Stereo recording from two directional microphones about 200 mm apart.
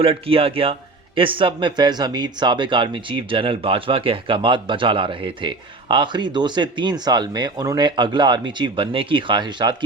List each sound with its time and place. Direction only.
0.0 s speech: 30° right (ahead or behind)